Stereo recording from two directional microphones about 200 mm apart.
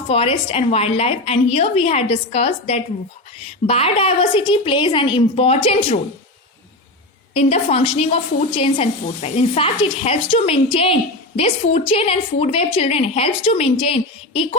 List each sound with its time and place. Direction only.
0.1 s a woman's voice: 30° left (ahead or behind)
7.3 s a woman's voice: 30° left (ahead or behind)